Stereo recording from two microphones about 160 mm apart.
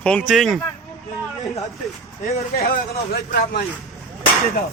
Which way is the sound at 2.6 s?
75° left (ahead or behind).